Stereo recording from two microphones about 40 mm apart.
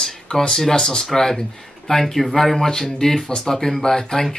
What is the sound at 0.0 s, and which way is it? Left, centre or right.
Speech, centre.